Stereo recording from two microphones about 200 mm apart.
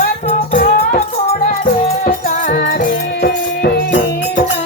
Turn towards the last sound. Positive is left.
turn(degrees=55)  # may be behind; listen again after turning